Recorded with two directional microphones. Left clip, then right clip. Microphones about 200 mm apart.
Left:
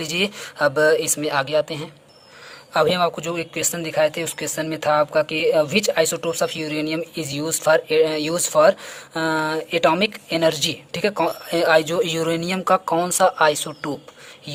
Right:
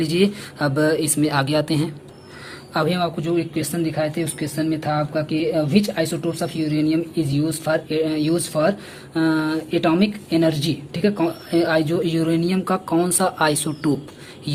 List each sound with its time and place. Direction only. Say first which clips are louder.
0.0 s speech: right 3 dB; 30° left (ahead or behind)
2.7 s speech: left 3 dB; 35° left (ahead or behind)